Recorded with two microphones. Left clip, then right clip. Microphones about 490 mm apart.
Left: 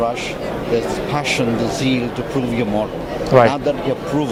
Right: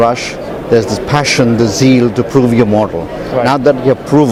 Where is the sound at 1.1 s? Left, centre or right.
Right.